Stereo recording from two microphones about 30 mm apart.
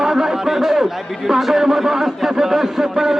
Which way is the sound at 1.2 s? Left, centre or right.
Centre.